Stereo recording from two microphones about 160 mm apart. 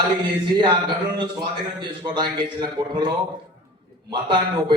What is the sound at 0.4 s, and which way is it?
Speech, 30° right (ahead or behind).